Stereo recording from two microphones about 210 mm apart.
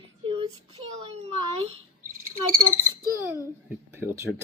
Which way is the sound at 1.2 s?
30° right (ahead or behind).